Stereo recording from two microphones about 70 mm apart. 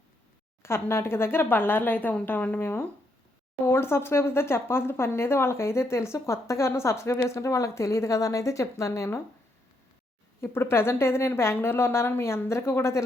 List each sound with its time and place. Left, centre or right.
0.6 s a woman's voice: left
10.4 s a woman's voice: left